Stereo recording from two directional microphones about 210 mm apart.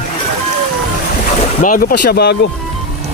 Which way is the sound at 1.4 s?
35° left (ahead or behind).